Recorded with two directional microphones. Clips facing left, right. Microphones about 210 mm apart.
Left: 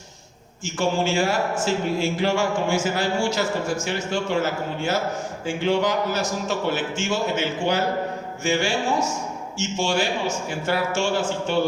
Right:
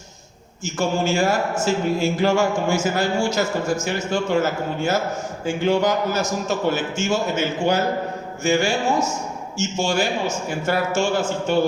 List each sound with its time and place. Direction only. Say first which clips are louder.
0.6 s a man's voice: right 1 dB; 45° right (ahead or behind)